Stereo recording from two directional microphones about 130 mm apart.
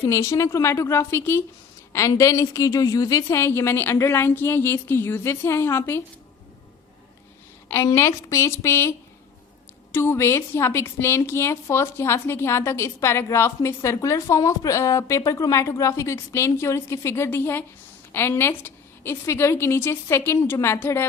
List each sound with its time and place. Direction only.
0.0 s a woman's voice: 25° left (ahead or behind)
7.7 s a woman's voice: 20° left (ahead or behind)